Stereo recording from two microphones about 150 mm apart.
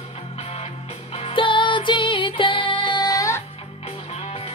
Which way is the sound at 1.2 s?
35° left (ahead or behind).